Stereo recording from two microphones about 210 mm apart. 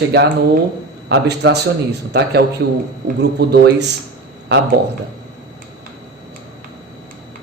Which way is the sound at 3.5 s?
50° right (ahead or behind).